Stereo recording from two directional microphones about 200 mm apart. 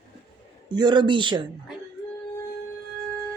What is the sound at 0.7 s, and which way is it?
Speech, 20° right (ahead or behind).